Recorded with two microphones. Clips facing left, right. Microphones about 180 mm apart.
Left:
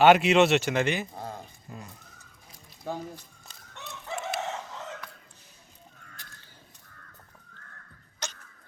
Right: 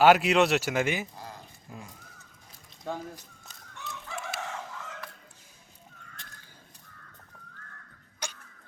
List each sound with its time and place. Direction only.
0.0 s speech: centre (ahead or behind)
2.9 s speech: 10° left (ahead or behind)
3.8 s chicken: 25° left (ahead or behind)
8.2 s a sound: 10° right (ahead or behind)